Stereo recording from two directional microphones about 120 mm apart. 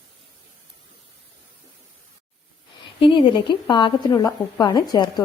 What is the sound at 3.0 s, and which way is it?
A woman's voice, 45° left (ahead or behind).